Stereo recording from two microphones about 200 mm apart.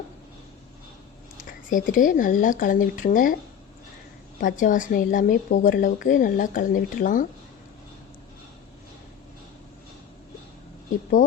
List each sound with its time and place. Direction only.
1.5 s a woman's voice: 40° left (ahead or behind)
4.4 s a woman's voice: 40° left (ahead or behind)